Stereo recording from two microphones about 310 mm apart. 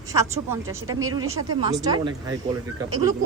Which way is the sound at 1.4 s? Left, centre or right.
Right.